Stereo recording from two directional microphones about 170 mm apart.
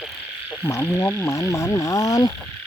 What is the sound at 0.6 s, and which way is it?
Speech, 15° left (ahead or behind).